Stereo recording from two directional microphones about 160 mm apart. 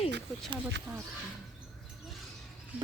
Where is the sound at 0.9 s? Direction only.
25° right (ahead or behind).